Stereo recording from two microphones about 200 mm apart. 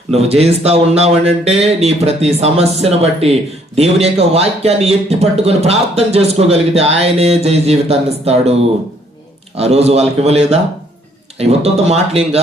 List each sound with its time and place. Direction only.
0.1 s speech: 30° right (ahead or behind)
9.6 s speech: 30° right (ahead or behind)